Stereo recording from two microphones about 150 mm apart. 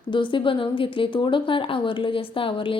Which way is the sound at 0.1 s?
30° left (ahead or behind).